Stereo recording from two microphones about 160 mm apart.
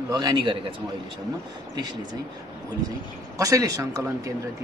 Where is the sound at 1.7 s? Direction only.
25° right (ahead or behind).